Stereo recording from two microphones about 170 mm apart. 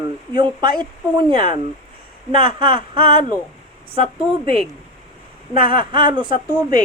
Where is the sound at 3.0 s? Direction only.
30° right (ahead or behind).